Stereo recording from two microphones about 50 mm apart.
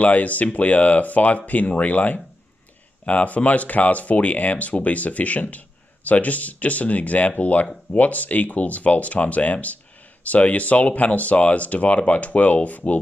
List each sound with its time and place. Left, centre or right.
0.0 s speech: left